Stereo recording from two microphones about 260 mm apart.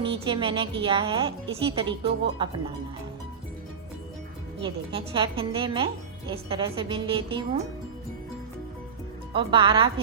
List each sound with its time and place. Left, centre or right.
0.0 s speech: centre
4.6 s speech: centre
9.3 s speech: centre